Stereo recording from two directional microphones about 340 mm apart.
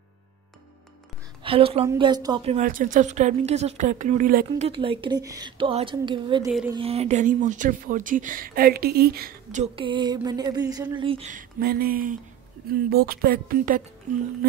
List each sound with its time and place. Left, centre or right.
1.4 s a woman's voice: centre
6.8 s speech: centre